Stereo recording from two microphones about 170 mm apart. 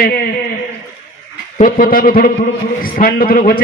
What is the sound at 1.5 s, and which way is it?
A man's voice, 50° left (ahead or behind).